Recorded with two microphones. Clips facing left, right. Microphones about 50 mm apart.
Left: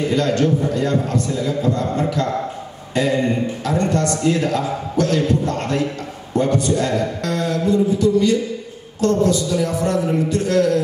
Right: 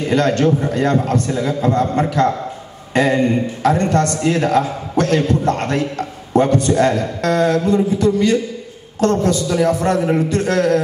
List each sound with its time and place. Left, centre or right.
0.1 s a man's voice: right